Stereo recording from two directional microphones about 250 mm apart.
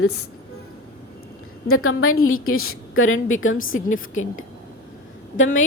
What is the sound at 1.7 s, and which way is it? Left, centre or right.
A woman's voice, left.